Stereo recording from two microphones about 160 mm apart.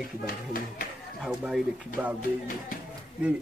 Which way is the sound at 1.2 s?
5° right (ahead or behind).